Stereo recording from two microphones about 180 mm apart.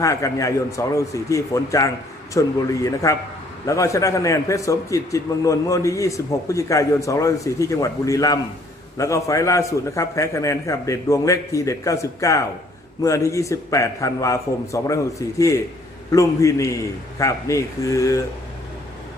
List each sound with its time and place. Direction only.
0.0 s a man's voice: 15° left (ahead or behind)